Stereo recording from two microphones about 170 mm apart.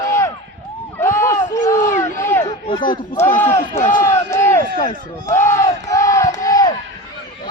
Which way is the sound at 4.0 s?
15° left (ahead or behind).